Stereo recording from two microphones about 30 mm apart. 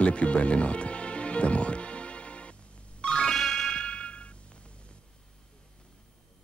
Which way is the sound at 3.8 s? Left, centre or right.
Left.